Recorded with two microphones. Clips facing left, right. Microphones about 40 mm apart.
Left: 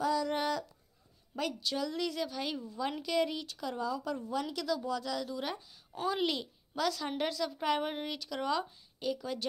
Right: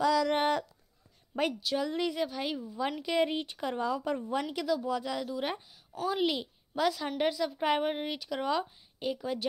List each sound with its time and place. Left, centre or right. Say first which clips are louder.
0.0 s a sound: right 5 dB; right
0.3 s a sound: right 5 dB; right
1.3 s speech: right 4 dB; right; by 2.8 s centre
3.0 s speech: right 3 dB; right
4.6 s speech: right 3 dB; centre
6.0 s speech: right 2 dB; centre